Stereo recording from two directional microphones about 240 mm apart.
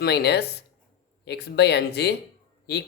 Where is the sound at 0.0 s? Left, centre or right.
Left.